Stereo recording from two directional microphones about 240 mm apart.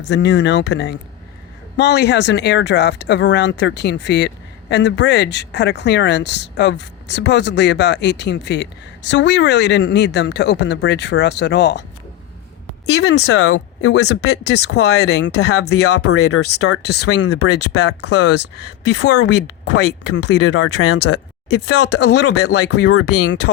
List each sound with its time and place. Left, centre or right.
0.1 s speech: left
12.9 s a woman's voice: left
20.4 s a woman's voice: left
21.9 s speech: left
22.3 s speech: left